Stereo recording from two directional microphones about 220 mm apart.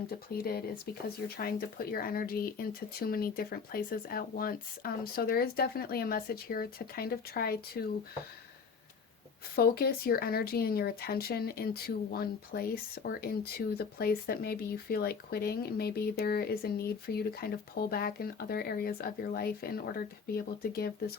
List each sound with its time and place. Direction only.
0.1 s speech: 45° left (ahead or behind)
9.6 s speech: 45° left (ahead or behind)